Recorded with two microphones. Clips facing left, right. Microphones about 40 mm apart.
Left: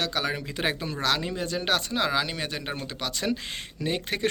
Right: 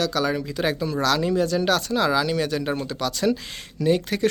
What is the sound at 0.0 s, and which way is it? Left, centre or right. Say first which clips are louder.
Speech: right 5 dB; left.